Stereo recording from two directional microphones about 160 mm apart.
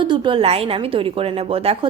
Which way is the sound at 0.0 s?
30° right (ahead or behind).